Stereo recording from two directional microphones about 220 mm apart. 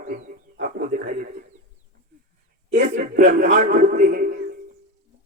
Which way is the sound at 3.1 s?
40° right (ahead or behind).